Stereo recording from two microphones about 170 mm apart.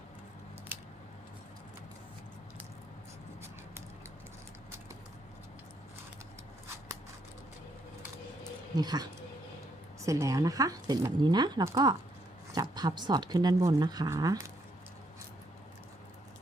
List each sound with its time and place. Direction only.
8.7 s speech: 25° right (ahead or behind)